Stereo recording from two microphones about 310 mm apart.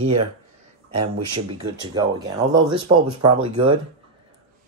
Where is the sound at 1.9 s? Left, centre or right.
Centre.